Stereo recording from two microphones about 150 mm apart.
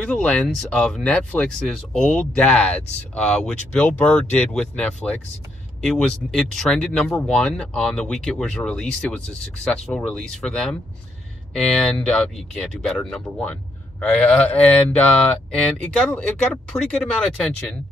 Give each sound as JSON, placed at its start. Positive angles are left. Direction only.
{"t": 0.0, "sound": "speech", "side_deg": 5}